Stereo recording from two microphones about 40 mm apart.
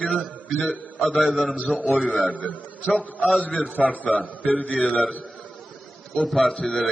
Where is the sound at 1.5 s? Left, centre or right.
Left.